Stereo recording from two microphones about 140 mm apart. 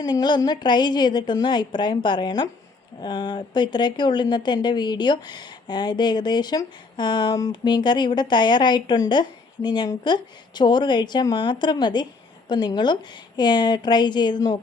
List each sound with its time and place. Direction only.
0.0 s speech: 30° left (ahead or behind)